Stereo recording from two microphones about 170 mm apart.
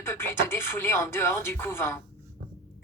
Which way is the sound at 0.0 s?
15° left (ahead or behind).